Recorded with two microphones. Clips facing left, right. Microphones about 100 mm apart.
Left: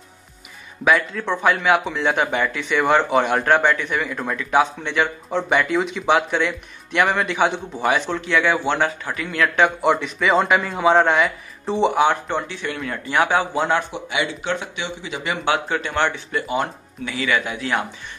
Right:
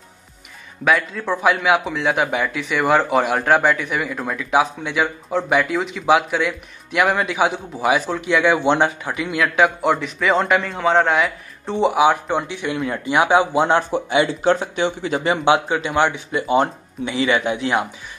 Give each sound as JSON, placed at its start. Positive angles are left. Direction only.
{"t": 0.8, "sound": "speech", "side_deg": 0}
{"t": 8.3, "sound": "speech", "side_deg": -15}
{"t": 13.7, "sound": "speech", "side_deg": -35}
{"t": 15.4, "sound": "speech", "side_deg": -15}